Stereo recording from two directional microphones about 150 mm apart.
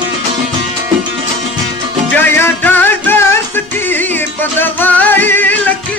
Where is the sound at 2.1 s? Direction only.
15° left (ahead or behind).